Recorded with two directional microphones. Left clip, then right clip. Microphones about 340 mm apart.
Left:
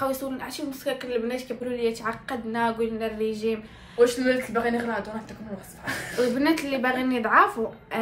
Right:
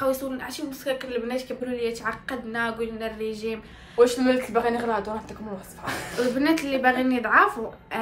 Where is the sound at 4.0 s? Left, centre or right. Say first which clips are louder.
Right 1 dB; centre.